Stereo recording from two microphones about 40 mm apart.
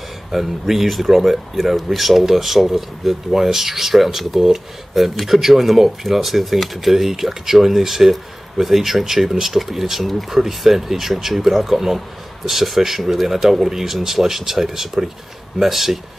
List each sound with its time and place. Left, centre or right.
0.3 s speech: centre